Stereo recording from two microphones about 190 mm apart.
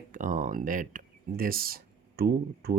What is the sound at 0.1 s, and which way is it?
Speech, 40° right (ahead or behind).